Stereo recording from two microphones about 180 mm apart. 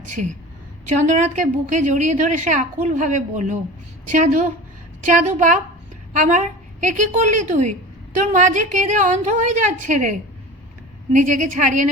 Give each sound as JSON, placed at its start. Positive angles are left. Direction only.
{"t": 0.1, "sound": "a woman's voice", "side_deg": -45}